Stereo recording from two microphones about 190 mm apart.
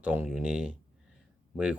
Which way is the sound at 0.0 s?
10° right (ahead or behind).